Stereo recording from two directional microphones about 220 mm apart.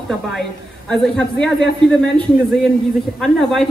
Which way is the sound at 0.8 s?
5° left (ahead or behind).